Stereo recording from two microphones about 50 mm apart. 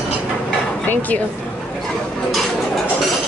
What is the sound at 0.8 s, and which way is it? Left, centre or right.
Speech, left.